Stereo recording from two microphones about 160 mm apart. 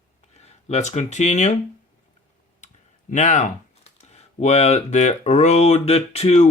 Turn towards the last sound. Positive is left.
turn(degrees=40)  # may be behind; listen again after turning